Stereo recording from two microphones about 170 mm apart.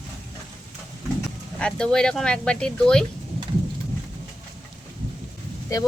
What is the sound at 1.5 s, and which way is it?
Speech, 5° left (ahead or behind).